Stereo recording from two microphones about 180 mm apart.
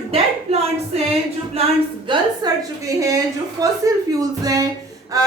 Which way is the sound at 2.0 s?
20° right (ahead or behind).